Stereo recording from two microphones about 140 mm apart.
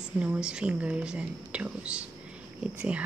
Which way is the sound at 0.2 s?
5° right (ahead or behind).